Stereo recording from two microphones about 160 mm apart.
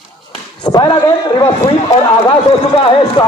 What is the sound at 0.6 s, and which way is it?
A man's voice, 25° left (ahead or behind).